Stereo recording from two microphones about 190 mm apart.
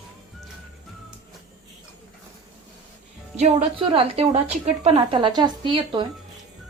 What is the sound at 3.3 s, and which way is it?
A woman's voice, 30° right (ahead or behind).